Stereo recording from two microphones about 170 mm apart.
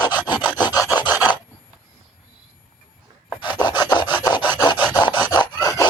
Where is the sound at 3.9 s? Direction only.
25° left (ahead or behind).